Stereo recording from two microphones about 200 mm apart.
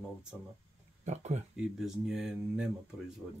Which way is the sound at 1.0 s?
35° right (ahead or behind).